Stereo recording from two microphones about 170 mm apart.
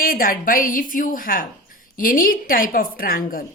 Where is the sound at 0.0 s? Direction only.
55° left (ahead or behind).